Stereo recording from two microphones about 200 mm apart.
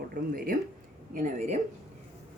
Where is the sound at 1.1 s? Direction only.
40° right (ahead or behind).